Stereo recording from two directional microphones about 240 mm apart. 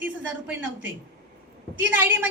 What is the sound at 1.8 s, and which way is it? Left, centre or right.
Speech, centre.